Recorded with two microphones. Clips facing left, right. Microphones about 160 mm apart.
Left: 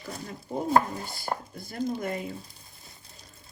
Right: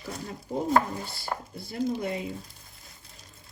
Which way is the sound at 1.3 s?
45° left (ahead or behind).